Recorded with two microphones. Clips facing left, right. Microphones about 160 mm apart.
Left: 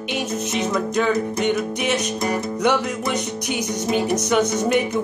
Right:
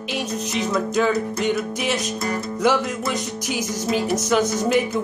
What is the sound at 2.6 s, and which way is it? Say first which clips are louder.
Speech: right 1 dB; centre (ahead or behind).